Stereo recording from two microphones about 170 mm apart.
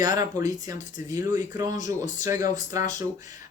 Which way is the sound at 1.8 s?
45° left (ahead or behind).